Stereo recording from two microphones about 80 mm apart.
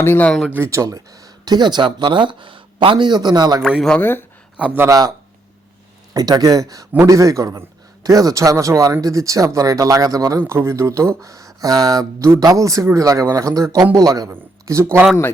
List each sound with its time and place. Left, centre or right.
0.0 s speech: left
0.3 s speech: centre
0.5 s speech: right
4.0 s speech: left
4.5 s speech: centre
4.9 s speech: right
6.1 s speech: right
10.4 s speech: right